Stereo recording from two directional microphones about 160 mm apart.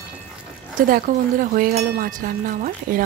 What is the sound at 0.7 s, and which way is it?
Speech, 60° right (ahead or behind).